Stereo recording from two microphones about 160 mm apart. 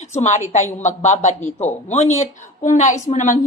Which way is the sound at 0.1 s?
45° left (ahead or behind).